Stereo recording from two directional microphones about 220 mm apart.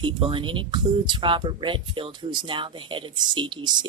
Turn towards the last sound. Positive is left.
turn(degrees=-20)  # may be behind; listen again after turning